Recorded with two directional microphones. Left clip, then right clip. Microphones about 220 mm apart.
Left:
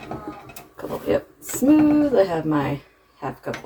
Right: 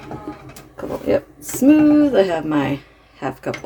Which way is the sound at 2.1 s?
50° right (ahead or behind).